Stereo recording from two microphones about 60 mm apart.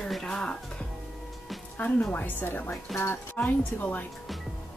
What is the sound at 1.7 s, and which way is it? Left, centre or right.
A woman's voice, left.